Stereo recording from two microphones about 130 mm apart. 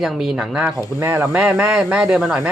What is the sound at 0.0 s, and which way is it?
Speech, 5° right (ahead or behind).